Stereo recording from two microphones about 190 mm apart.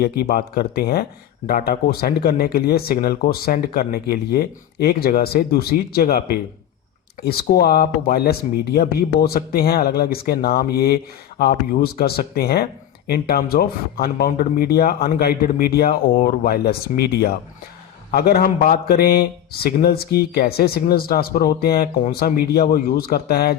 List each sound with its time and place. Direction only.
0.0 s speech: 55° left (ahead or behind)